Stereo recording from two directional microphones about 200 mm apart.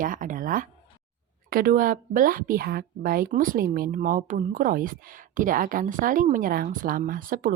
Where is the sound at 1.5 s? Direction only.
45° right (ahead or behind).